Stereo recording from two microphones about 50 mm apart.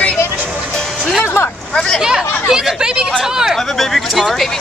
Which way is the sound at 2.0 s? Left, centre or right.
Centre.